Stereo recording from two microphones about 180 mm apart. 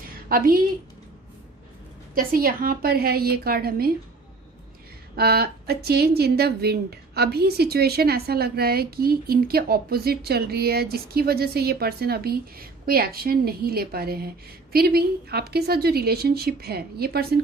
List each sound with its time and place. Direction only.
0.3 s a woman's voice: 50° right (ahead or behind)
2.1 s a woman's voice: 50° right (ahead or behind)
5.1 s a woman's voice: 60° right (ahead or behind)